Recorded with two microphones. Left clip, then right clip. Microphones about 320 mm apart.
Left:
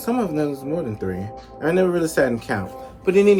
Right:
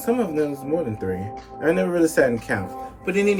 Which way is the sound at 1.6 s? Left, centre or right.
Centre.